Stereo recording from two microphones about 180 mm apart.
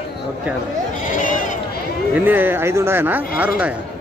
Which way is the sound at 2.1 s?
10° right (ahead or behind).